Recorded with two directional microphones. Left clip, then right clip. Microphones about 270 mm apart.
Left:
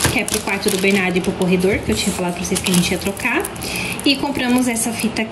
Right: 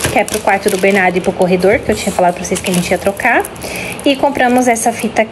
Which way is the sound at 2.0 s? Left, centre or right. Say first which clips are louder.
Right 9 dB; right.